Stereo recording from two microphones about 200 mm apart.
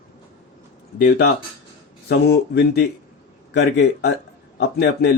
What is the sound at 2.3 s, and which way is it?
Speech, 55° left (ahead or behind).